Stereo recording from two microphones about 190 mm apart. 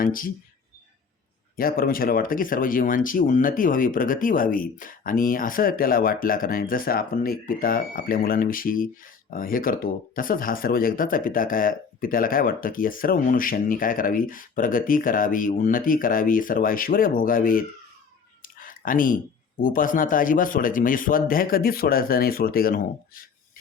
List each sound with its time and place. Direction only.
0.0 s speech: 50° left (ahead or behind)
1.5 s speech: 50° left (ahead or behind)